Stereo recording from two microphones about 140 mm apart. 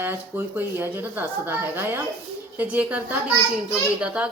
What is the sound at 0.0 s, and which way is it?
A woman's voice, 15° right (ahead or behind).